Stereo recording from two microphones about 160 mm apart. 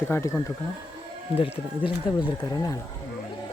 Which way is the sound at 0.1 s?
15° left (ahead or behind).